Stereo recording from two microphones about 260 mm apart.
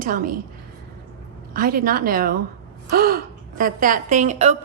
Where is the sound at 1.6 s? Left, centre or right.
Right.